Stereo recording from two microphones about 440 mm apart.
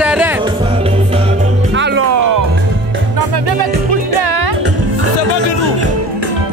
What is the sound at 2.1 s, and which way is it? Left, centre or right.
Music, right.